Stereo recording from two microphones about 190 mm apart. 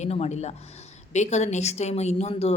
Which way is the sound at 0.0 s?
35° left (ahead or behind).